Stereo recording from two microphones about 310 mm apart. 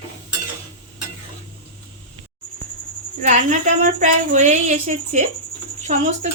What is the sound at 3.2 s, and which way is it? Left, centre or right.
A woman's voice, right.